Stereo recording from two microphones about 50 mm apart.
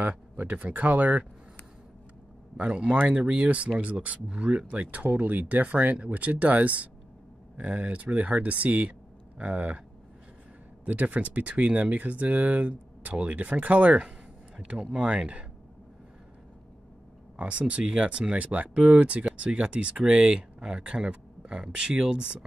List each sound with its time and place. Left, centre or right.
0.4 s speech: right
2.5 s speech: right
10.9 s speech: right
17.4 s speech: right